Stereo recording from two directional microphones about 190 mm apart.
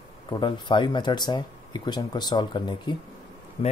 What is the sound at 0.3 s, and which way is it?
Speech, 25° left (ahead or behind).